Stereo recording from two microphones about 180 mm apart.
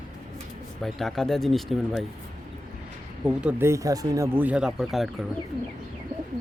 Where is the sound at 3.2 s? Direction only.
10° right (ahead or behind).